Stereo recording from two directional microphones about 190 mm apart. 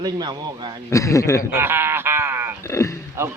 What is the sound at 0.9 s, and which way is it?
Speech, 15° left (ahead or behind).